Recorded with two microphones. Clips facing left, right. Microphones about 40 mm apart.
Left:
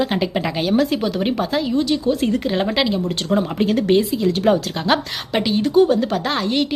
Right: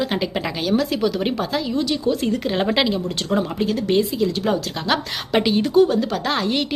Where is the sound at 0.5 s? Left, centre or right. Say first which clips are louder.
Left 3 dB; centre.